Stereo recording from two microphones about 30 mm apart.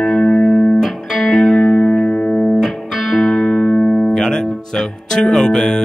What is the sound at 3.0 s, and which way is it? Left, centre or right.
Music, centre.